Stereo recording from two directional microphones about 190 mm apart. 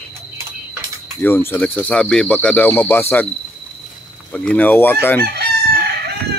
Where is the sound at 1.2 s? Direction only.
10° left (ahead or behind).